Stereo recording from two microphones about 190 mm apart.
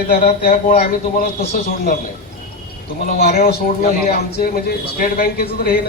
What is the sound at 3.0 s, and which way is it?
Speech, 35° left (ahead or behind).